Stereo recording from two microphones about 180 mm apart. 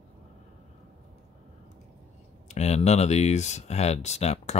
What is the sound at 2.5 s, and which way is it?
Speech, 35° left (ahead or behind).